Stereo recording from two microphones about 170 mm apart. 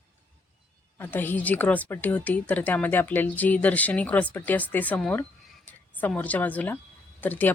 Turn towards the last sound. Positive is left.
turn(degrees=10)  # may be behind; listen again after turning